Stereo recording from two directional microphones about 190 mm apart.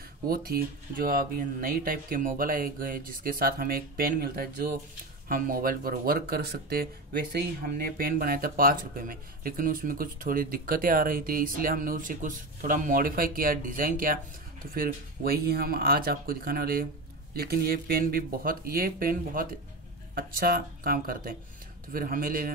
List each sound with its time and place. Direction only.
0.3 s speech: 50° right (ahead or behind)